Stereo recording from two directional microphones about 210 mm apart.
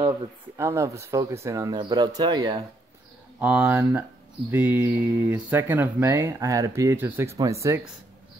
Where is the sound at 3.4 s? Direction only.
5° right (ahead or behind).